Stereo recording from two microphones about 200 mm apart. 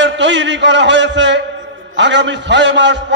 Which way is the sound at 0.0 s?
65° right (ahead or behind).